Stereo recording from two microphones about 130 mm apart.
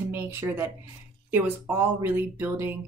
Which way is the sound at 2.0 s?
15° right (ahead or behind).